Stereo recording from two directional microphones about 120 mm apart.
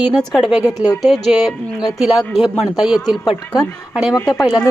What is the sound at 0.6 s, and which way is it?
Speech, 30° left (ahead or behind).